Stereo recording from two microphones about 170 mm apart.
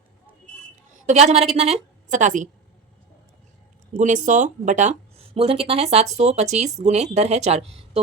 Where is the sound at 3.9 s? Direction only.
45° right (ahead or behind).